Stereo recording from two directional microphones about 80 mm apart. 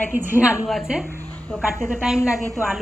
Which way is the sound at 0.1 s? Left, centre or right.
Right.